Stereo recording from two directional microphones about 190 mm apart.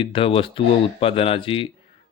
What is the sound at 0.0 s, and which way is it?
Speech, 30° left (ahead or behind).